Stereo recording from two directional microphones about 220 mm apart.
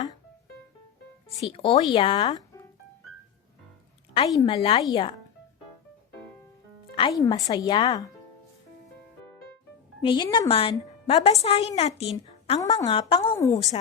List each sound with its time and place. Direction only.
1.5 s speech: 25° left (ahead or behind)
4.4 s speech: 20° left (ahead or behind)
6.9 s speech: 20° left (ahead or behind)
10.0 s speech: 20° left (ahead or behind)